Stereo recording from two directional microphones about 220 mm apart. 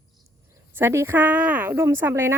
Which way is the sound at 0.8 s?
10° right (ahead or behind).